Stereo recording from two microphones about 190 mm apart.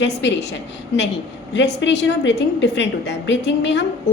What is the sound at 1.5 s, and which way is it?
A woman's voice, 70° left (ahead or behind).